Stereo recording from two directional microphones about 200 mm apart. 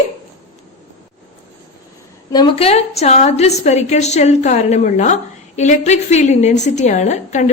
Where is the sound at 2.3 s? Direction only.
20° left (ahead or behind).